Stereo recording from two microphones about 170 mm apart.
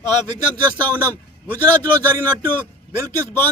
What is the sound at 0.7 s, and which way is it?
A man's voice, 10° left (ahead or behind).